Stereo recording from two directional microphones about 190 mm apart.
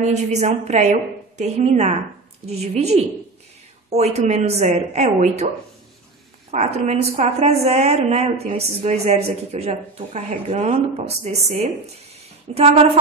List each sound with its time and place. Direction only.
0.0 s a woman's voice: 35° right (ahead or behind)
6.5 s a woman's voice: 35° right (ahead or behind)